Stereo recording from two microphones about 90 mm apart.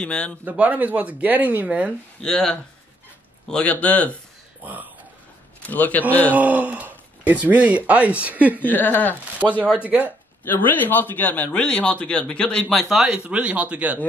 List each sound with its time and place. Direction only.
0.0 s speech: 10° left (ahead or behind)
0.5 s speech: 20° right (ahead or behind)
2.2 s speech: 10° left (ahead or behind)
4.6 s speech: 20° right (ahead or behind)
5.7 s speech: 20° left (ahead or behind)
6.3 s speech: 15° right (ahead or behind)
8.6 s speech: 20° left (ahead or behind)
9.4 s speech: 20° right (ahead or behind)
10.4 s speech: 20° left (ahead or behind); by 14.0 s 15° right (ahead or behind)